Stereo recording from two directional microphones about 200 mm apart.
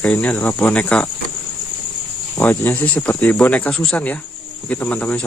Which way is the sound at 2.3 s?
10° left (ahead or behind).